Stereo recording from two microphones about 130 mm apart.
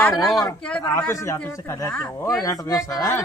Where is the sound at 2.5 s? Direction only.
25° left (ahead or behind).